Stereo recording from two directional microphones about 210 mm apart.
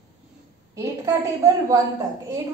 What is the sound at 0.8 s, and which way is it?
A woman's voice, 15° right (ahead or behind).